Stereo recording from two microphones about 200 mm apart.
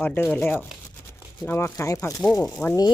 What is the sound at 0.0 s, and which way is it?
Speech, 10° left (ahead or behind).